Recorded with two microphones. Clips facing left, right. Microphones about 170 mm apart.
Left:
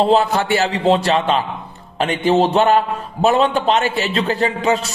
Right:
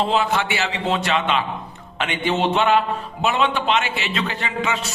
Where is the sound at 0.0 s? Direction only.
35° left (ahead or behind).